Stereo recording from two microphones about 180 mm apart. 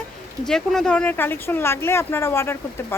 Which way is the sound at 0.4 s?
Centre (ahead or behind).